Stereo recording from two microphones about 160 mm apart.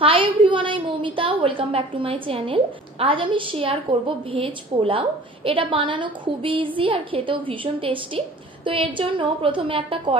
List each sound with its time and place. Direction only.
0.0 s a woman's voice: 30° right (ahead or behind)